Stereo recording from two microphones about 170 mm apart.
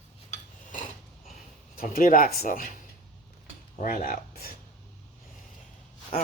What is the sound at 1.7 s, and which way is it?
Speech, 55° left (ahead or behind).